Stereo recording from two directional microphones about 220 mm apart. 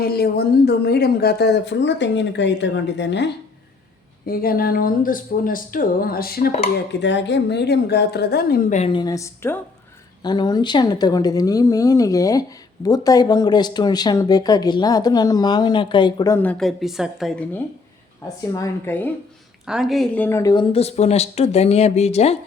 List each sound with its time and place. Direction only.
0.0 s speech: 45° left (ahead or behind)
7.0 s speech: 55° left (ahead or behind)
8.8 s a woman's voice: 20° left (ahead or behind)
19.6 s speech: centre (ahead or behind); by 22.4 s 30° left (ahead or behind)